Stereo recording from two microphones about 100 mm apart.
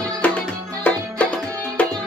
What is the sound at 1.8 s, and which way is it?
Music, 15° left (ahead or behind).